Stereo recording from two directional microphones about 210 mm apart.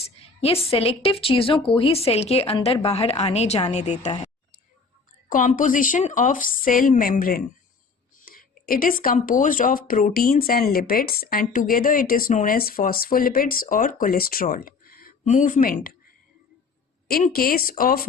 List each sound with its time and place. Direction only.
0.0 s a woman's voice: 30° left (ahead or behind)
5.3 s a woman's voice: 40° left (ahead or behind)
17.1 s speech: 45° left (ahead or behind)